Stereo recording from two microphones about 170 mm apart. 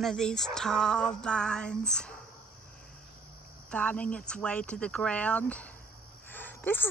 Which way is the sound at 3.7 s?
5° left (ahead or behind).